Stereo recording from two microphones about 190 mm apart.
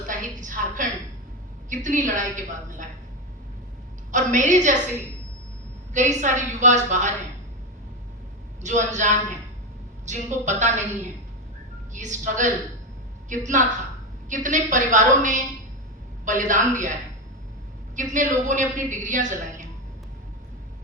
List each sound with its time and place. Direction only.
0.1 s a sound: 45° right (ahead or behind)
1.7 s a woman's voice: 40° right (ahead or behind)
4.1 s a woman's voice: 40° right (ahead or behind)
5.9 s a woman's voice: 40° right (ahead or behind)
8.6 s a woman's voice: 40° right (ahead or behind)
11.9 s a woman's voice: 40° right (ahead or behind)
17.9 s a woman's voice: 40° right (ahead or behind)